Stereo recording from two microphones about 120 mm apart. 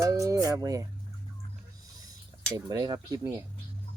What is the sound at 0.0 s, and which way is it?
Speech, 25° right (ahead or behind).